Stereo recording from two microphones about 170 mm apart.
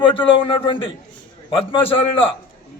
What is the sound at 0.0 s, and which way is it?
Speech, 30° left (ahead or behind).